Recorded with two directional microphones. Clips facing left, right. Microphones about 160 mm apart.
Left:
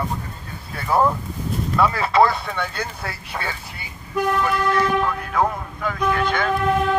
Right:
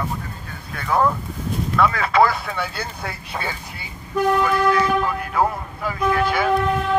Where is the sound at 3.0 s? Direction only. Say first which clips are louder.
Right 1 dB; 15° right (ahead or behind).